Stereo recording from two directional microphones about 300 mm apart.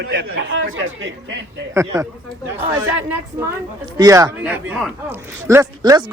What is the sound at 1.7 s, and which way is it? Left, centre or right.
Speech, centre.